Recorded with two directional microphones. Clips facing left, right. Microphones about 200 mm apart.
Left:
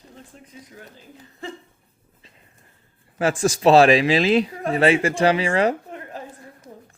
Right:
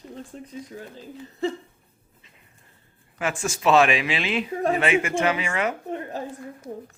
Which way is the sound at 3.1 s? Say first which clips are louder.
Left 7 dB; 35° left (ahead or behind).